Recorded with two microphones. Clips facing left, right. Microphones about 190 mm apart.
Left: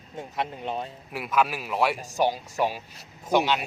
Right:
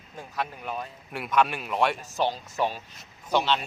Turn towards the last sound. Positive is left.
turn(degrees=10)  # may be behind; listen again after turning